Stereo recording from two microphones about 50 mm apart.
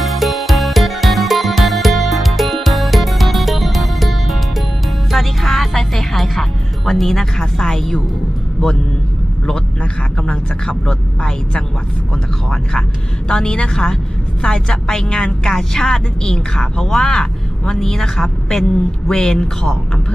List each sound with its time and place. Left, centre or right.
0.0 s music: centre
9.5 s a woman's voice: centre
13.2 s a woman's voice: centre